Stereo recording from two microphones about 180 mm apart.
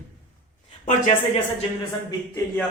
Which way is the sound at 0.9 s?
40° left (ahead or behind).